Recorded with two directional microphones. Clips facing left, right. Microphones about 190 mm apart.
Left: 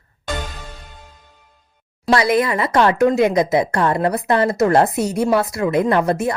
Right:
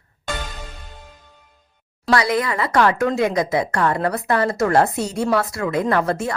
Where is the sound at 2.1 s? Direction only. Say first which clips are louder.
Left 3 dB; 25° left (ahead or behind).